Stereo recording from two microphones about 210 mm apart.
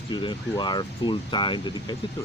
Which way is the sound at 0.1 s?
20° left (ahead or behind).